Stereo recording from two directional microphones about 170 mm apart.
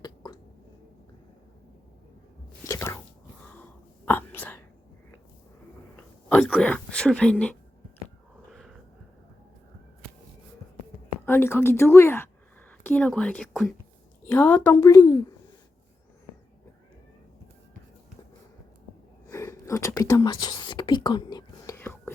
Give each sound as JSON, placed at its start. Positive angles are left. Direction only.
{"t": 0.0, "sound": "a sound", "side_deg": 25}
{"t": 2.6, "sound": "whispering", "side_deg": 15}
{"t": 6.0, "sound": "speech", "side_deg": 10}
{"t": 11.3, "sound": "a woman's voice", "side_deg": 15}
{"t": 19.3, "sound": "whispering", "side_deg": 15}